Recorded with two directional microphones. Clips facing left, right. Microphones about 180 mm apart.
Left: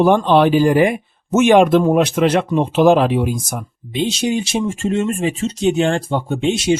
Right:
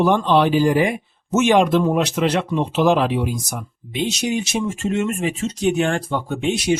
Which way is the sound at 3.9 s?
30° left (ahead or behind).